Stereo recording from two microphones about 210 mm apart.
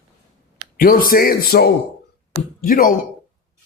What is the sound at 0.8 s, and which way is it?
A man's voice, 40° left (ahead or behind).